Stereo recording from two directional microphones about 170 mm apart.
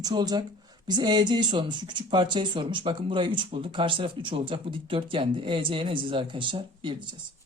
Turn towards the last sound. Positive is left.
turn(degrees=-30)  # may be behind; listen again after turning